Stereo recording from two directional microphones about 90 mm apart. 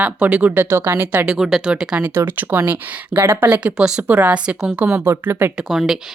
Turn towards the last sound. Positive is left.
turn(degrees=-5)  # may be behind; listen again after turning